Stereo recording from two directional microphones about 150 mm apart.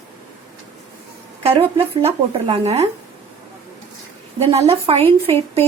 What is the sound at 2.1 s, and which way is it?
Speech, 45° right (ahead or behind).